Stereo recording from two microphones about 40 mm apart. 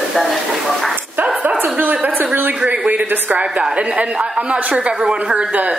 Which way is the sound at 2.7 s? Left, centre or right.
Right.